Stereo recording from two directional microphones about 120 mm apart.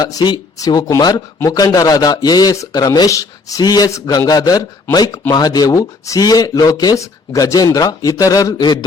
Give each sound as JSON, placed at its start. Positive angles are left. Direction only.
{"t": 0.0, "sound": "speech", "side_deg": 35}